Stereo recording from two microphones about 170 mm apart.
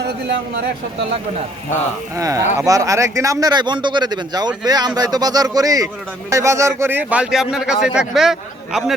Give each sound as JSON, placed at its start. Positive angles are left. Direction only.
{"t": 2.1, "sound": "a man's voice", "side_deg": -20}